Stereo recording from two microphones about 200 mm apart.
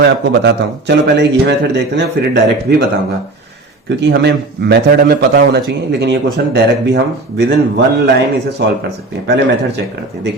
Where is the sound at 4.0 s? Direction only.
60° right (ahead or behind).